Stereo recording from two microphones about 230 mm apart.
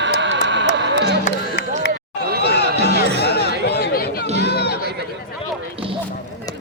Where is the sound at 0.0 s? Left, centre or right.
Right.